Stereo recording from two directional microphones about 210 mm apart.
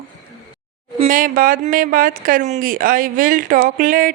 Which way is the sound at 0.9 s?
40° right (ahead or behind).